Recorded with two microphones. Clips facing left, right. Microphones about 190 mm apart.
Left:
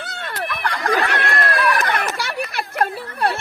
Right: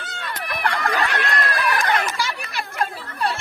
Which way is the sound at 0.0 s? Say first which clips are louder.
Left 3 dB; 60° left (ahead or behind).